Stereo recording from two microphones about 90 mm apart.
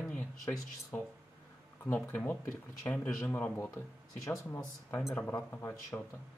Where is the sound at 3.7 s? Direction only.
35° left (ahead or behind).